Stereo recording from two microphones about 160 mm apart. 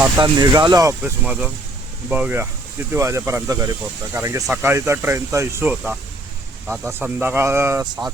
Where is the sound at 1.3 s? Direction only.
10° right (ahead or behind).